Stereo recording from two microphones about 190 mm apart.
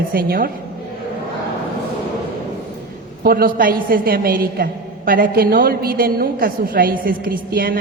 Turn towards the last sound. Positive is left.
turn(degrees=-50)  # may be behind; listen again after turning